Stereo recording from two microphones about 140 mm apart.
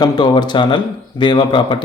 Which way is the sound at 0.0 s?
30° left (ahead or behind).